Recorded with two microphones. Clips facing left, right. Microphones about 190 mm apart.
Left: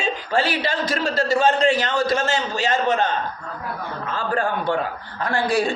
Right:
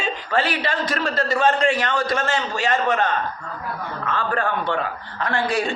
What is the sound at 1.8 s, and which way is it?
A man's voice, 25° left (ahead or behind).